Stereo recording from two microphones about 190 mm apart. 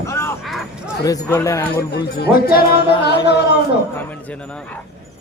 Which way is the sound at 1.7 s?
55° left (ahead or behind).